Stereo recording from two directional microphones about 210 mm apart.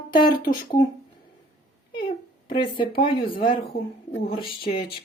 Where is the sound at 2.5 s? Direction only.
25° left (ahead or behind).